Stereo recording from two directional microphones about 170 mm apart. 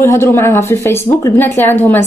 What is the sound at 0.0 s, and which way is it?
Speech, 15° left (ahead or behind).